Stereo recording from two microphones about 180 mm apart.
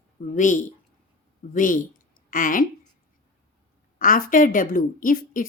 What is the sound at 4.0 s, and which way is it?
A woman's voice, 50° left (ahead or behind).